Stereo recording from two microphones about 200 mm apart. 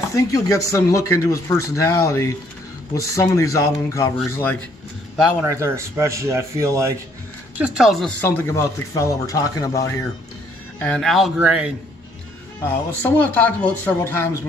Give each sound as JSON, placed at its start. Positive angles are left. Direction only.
{"t": 0.1, "sound": "speech", "side_deg": 15}
{"t": 5.4, "sound": "speech", "side_deg": -15}
{"t": 10.8, "sound": "speech", "side_deg": 5}
{"t": 12.6, "sound": "speech", "side_deg": 10}